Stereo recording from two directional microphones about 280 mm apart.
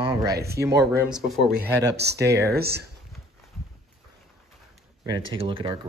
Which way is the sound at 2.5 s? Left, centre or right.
Right.